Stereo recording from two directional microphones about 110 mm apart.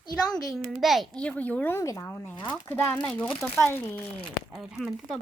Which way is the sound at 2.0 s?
15° left (ahead or behind).